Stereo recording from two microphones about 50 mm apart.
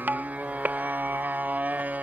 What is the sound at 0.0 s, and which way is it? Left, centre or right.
Music, right.